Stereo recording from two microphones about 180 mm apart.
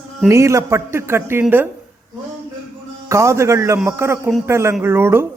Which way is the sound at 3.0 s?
15° right (ahead or behind).